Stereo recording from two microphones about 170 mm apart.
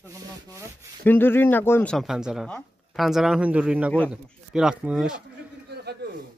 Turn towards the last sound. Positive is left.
turn(degrees=-5)  # may be behind; listen again after turning